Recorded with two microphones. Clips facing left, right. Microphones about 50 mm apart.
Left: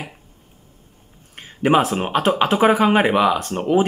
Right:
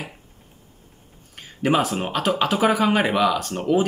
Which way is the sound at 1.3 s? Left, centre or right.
Left.